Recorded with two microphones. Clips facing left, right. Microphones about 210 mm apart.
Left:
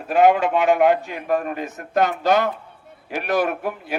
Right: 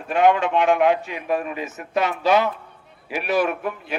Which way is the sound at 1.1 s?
50° left (ahead or behind).